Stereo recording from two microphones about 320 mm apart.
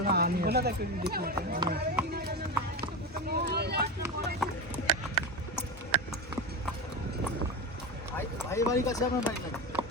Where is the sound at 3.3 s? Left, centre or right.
Right.